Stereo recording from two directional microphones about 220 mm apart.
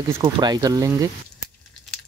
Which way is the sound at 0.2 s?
20° right (ahead or behind).